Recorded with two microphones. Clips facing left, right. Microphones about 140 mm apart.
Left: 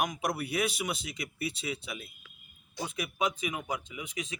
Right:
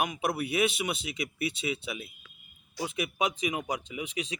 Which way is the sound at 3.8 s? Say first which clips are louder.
Right 4 dB; 80° right.